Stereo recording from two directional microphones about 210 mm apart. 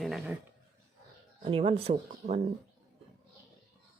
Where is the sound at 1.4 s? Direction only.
25° right (ahead or behind).